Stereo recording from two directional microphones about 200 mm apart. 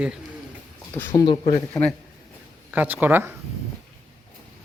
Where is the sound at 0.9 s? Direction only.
10° left (ahead or behind).